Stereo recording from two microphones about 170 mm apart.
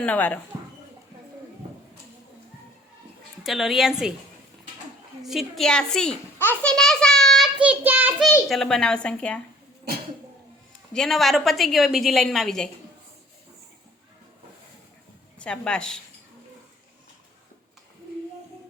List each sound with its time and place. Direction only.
0.0 s speech: 10° left (ahead or behind)
0.5 s a sound: 15° right (ahead or behind)
3.4 s a woman's voice: centre (ahead or behind)
5.2 s a child's voice: centre (ahead or behind)
8.4 s a woman's voice: centre (ahead or behind)
10.9 s a woman's voice: centre (ahead or behind)
15.4 s a woman's voice: 5° left (ahead or behind)